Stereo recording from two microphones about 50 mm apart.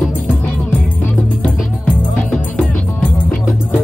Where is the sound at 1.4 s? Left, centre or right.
Left.